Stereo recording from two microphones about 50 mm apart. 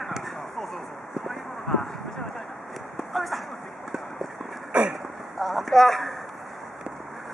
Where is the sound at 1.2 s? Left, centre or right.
Centre.